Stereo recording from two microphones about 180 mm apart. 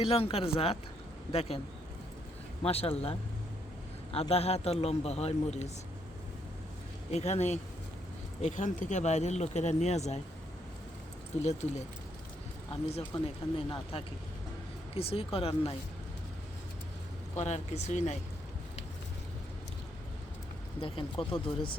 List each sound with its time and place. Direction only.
0.1 s speech: 30° left (ahead or behind)
2.6 s speech: 35° left (ahead or behind)
7.1 s speech: 35° left (ahead or behind)
11.4 s speech: 40° left (ahead or behind)
12.9 s speech: 30° left (ahead or behind)
14.9 s speech: 30° left (ahead or behind)
17.4 s speech: 40° left (ahead or behind)
20.8 s speech: 30° left (ahead or behind)